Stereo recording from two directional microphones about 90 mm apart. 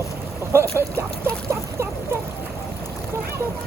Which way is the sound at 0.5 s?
25° right (ahead or behind).